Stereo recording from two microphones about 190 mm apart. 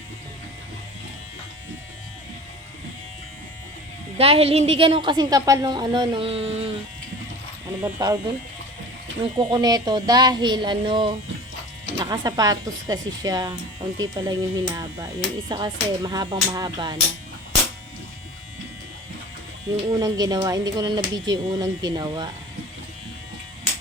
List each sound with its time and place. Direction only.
4.2 s a woman's voice: 30° right (ahead or behind)
7.8 s a woman's voice: 20° right (ahead or behind)
9.4 s a woman's voice: 20° right (ahead or behind)
19.7 s a woman's voice: 25° right (ahead or behind)